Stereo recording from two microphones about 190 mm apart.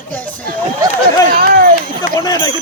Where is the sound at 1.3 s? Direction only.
50° right (ahead or behind).